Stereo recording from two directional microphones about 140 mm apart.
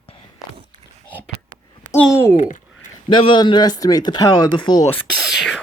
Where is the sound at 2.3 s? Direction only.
65° left (ahead or behind).